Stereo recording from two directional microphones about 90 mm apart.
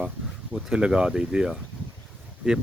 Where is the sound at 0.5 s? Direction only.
10° right (ahead or behind).